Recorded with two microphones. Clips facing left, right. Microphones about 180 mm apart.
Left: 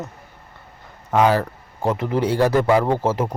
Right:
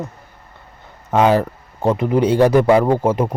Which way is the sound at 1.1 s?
20° right (ahead or behind).